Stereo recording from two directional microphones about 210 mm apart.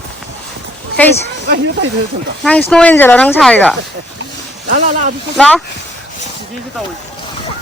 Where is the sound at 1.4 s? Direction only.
55° right (ahead or behind).